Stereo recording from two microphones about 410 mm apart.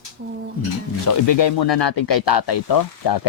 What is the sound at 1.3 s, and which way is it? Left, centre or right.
Speech, left.